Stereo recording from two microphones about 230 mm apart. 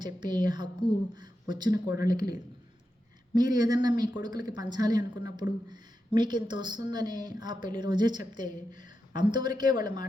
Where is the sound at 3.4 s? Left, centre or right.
Centre.